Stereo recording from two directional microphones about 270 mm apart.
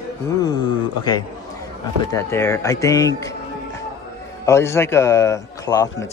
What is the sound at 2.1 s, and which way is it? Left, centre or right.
Speech, centre.